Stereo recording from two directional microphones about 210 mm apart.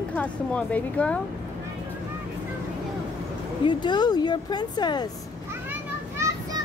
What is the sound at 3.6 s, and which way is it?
Speech, 20° left (ahead or behind).